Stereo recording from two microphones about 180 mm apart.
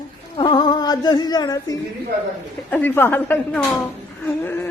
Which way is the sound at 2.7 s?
10° left (ahead or behind).